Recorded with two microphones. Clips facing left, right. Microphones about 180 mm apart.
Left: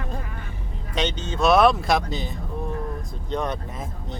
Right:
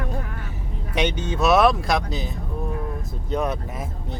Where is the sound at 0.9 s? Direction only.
10° right (ahead or behind).